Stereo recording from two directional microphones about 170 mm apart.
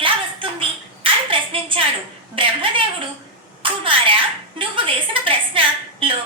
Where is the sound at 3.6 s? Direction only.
30° right (ahead or behind).